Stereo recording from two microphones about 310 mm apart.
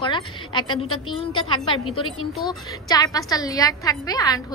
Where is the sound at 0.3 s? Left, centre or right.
Centre.